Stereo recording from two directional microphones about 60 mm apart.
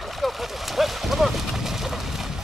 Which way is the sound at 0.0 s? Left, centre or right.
Centre.